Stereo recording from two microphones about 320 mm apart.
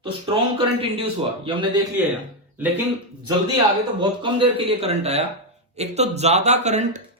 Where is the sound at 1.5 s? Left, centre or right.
Centre.